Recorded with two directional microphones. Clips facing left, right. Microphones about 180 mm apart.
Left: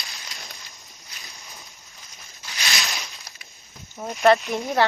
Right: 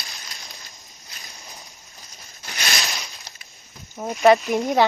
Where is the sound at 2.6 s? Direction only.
Centre (ahead or behind).